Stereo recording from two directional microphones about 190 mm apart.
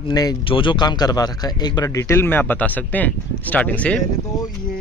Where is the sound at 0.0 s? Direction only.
20° left (ahead or behind).